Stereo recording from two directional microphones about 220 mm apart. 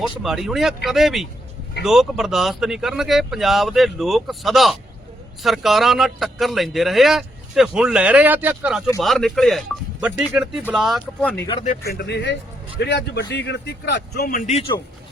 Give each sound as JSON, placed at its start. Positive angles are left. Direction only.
{"t": 0.0, "sound": "a man's voice", "side_deg": 0}
{"t": 11.6, "sound": "a man's voice", "side_deg": 40}